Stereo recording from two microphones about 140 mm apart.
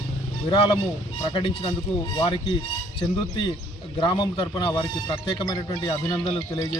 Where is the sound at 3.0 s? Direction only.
35° left (ahead or behind).